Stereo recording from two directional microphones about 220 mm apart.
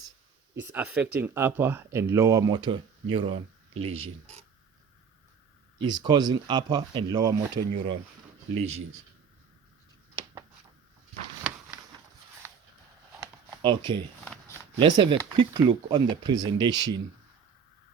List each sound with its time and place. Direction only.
0.6 s speech: 10° right (ahead or behind); by 4.0 s 25° right (ahead or behind)
5.8 s speech: 20° right (ahead or behind)
12.4 s a sound: 10° right (ahead or behind)
14.8 s speech: 20° right (ahead or behind)